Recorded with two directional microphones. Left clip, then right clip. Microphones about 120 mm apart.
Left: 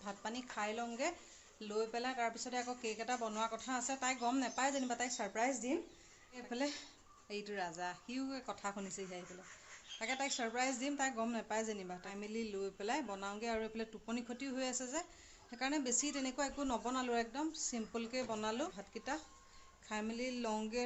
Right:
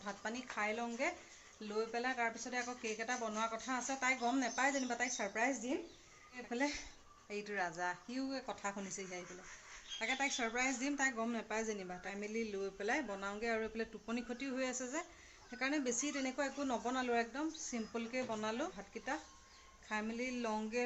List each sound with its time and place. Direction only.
0.0 s a woman's voice: 20° left (ahead or behind)